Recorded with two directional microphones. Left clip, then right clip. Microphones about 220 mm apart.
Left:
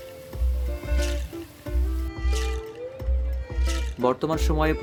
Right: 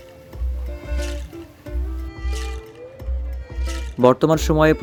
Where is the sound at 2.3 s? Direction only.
Centre (ahead or behind).